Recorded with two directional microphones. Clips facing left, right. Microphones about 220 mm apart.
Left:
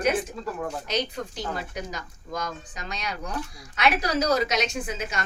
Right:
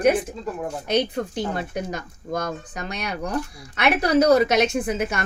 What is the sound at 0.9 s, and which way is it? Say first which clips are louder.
Speech: right 10 dB; 55° right (ahead or behind).